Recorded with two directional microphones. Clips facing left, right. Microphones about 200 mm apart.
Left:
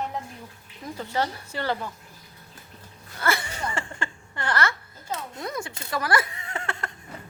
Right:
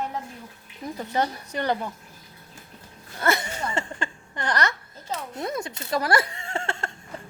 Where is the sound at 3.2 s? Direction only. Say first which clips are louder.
Right 2 dB; 20° right (ahead or behind).